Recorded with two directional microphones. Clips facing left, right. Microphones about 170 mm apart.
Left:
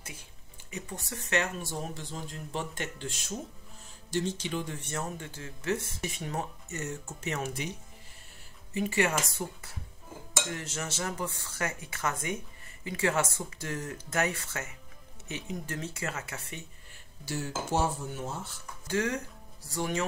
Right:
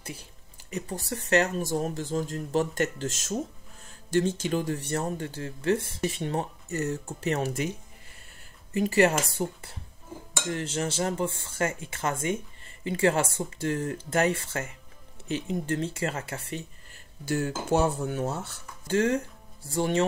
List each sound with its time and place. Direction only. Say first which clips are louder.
0.0 s speech: right 7 dB; 35° right (ahead or behind)
8.7 s speech: right 6 dB; 35° right (ahead or behind)
17.2 s speech: right 6 dB; 50° right (ahead or behind); by 18.6 s 70° right (ahead or behind)
18.9 s speech: right 6 dB; 30° right (ahead or behind)